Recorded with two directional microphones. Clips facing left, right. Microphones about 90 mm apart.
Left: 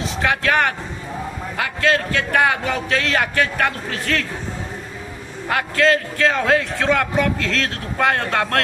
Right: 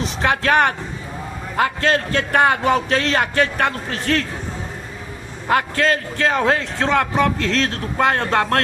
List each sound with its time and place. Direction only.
0.2 s a man's voice: 35° right (ahead or behind)
5.5 s a man's voice: 30° right (ahead or behind)